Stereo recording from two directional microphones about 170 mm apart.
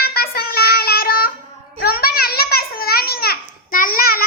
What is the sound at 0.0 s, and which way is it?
Child singing, 65° left (ahead or behind).